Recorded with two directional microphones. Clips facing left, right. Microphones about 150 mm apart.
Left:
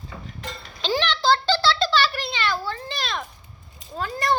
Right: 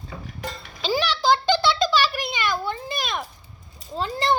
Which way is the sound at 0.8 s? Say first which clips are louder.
Even; 10° right (ahead or behind).